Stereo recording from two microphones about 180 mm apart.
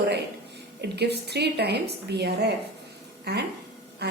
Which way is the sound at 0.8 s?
65° right (ahead or behind).